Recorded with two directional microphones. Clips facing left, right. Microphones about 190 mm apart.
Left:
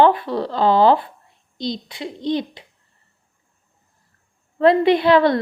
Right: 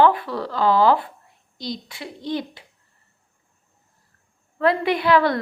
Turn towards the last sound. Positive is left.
turn(degrees=25)  # may be behind; listen again after turning